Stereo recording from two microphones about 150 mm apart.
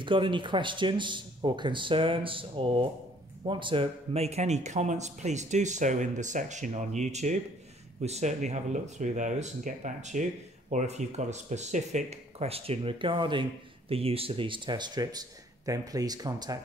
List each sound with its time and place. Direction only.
0.0 s speech: 35° right (ahead or behind)